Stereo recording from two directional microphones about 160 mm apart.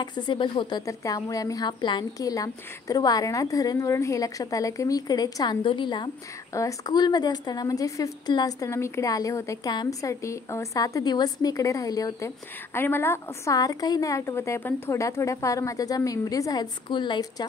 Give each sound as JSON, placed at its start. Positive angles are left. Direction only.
{"t": 0.0, "sound": "a woman's voice", "side_deg": 30}